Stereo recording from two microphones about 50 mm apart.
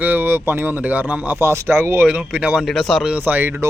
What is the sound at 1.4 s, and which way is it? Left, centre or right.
Speech, right.